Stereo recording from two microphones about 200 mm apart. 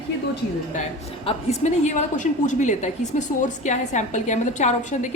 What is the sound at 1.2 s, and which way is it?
A woman's voice, 35° left (ahead or behind).